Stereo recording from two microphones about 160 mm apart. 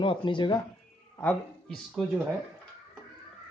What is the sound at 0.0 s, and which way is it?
Speech, 30° left (ahead or behind).